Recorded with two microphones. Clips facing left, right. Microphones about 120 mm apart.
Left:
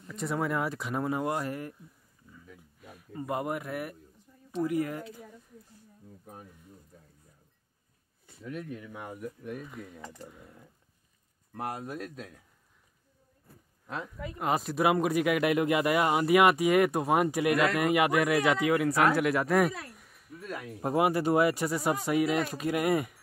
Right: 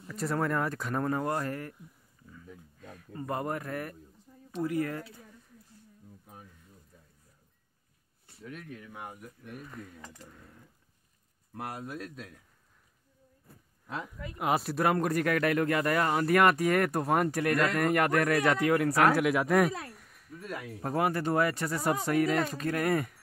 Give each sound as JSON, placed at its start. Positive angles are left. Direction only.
{"t": 0.0, "sound": "speech", "side_deg": 0}
{"t": 2.3, "sound": "a sound", "side_deg": 15}
{"t": 4.6, "sound": "speech", "side_deg": 20}
{"t": 11.8, "sound": "speech", "side_deg": 5}
{"t": 14.4, "sound": "speech", "side_deg": -5}
{"t": 20.0, "sound": "a sound", "side_deg": 5}
{"t": 20.7, "sound": "speech", "side_deg": 15}